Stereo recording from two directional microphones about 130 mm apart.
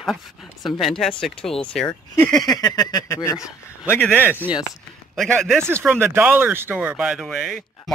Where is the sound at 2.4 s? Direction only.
30° left (ahead or behind).